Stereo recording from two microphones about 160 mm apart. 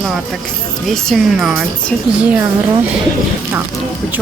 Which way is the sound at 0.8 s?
Centre (ahead or behind).